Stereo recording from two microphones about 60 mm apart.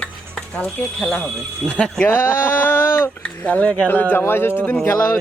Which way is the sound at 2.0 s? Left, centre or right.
Left.